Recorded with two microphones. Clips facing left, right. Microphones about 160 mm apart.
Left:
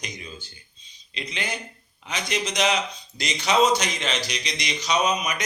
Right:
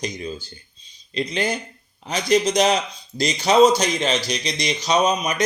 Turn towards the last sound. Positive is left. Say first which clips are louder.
# right 5 dB
turn(degrees=-30)  # may be behind; listen again after turning